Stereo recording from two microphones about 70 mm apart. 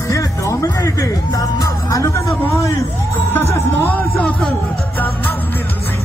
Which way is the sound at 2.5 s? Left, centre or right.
Left.